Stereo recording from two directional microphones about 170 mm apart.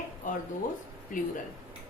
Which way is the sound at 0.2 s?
50° left (ahead or behind).